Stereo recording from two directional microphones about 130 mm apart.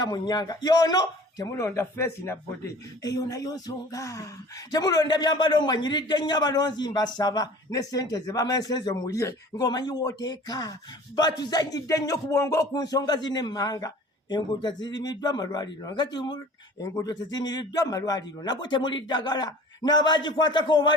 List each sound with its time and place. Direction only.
0.0 s a man's voice: 35° left (ahead or behind)